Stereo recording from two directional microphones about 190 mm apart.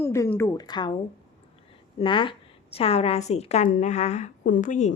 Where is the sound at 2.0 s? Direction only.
25° left (ahead or behind).